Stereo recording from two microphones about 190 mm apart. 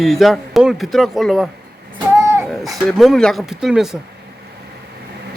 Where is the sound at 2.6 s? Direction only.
Centre (ahead or behind).